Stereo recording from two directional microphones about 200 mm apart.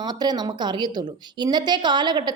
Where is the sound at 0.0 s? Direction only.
20° right (ahead or behind).